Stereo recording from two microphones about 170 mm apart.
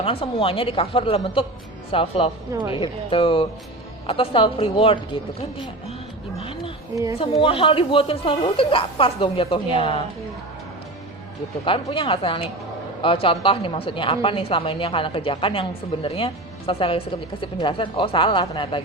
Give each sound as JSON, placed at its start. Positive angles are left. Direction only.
{"t": 0.0, "sound": "speech", "side_deg": 35}
{"t": 6.9, "sound": "a woman's voice", "side_deg": -20}
{"t": 7.2, "sound": "speech", "side_deg": 35}
{"t": 11.6, "sound": "speech", "side_deg": 30}